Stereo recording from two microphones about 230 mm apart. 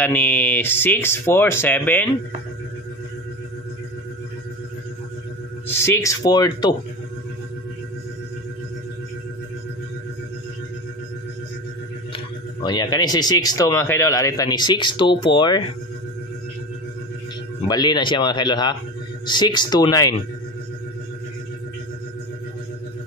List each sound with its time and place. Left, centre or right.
0.0 s speech: centre
5.7 s speech: centre
12.6 s speech: centre
17.6 s speech: centre